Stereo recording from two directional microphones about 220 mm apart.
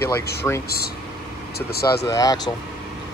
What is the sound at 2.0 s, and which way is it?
Speech, 15° left (ahead or behind).